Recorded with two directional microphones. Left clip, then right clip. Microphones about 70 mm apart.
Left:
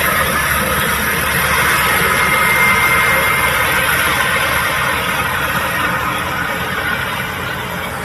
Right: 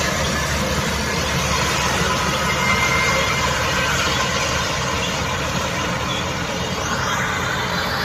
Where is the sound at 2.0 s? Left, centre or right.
Left.